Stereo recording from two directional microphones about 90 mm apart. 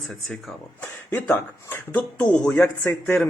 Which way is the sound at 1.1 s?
20° left (ahead or behind).